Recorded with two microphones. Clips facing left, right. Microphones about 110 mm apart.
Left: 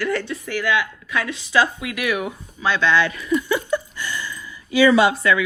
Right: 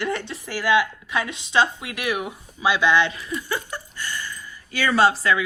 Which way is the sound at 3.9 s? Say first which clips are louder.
Left 3 dB; 50° right (ahead or behind).